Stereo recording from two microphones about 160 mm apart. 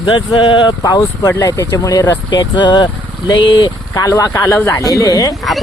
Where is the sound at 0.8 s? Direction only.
20° left (ahead or behind).